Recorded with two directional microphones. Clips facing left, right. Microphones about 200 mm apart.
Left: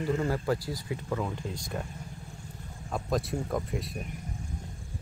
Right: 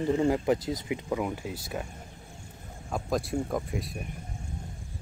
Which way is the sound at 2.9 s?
Centre (ahead or behind).